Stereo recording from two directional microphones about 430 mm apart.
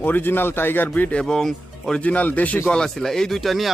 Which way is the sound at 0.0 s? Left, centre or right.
Centre.